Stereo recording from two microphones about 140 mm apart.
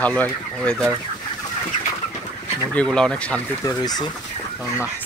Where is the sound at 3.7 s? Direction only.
30° left (ahead or behind).